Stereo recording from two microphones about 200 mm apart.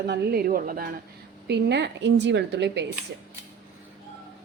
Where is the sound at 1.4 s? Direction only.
60° right (ahead or behind).